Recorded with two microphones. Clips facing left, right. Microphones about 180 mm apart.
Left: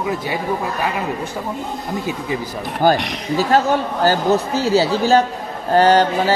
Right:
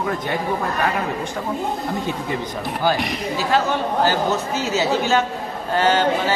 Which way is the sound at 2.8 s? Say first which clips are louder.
Left 5 dB; 45° left (ahead or behind).